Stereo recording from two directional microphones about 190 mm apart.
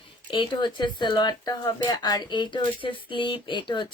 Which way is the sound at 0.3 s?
25° left (ahead or behind).